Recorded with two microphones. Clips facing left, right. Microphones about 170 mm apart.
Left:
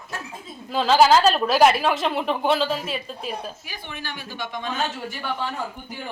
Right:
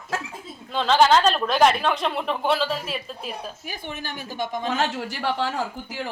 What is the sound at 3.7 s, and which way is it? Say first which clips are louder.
Speech: right 2 dB; 45° right (ahead or behind).